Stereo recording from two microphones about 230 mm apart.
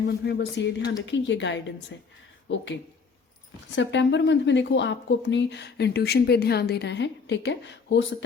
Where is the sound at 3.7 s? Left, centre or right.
Left.